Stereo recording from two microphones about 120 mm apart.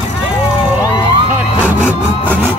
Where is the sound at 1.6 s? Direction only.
15° left (ahead or behind).